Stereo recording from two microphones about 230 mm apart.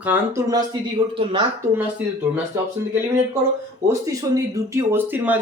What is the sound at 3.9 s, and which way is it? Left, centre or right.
Speech, centre.